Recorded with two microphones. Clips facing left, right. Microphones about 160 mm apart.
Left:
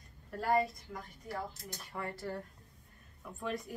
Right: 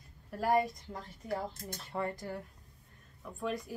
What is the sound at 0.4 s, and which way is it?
Speech, 15° right (ahead or behind).